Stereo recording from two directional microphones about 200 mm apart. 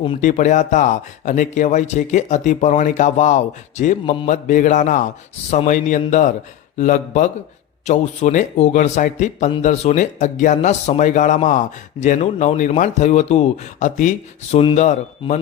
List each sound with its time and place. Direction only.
0.2 s speech: 40° left (ahead or behind)